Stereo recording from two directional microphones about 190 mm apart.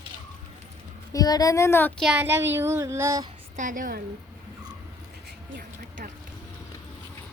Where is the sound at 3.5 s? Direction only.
45° right (ahead or behind).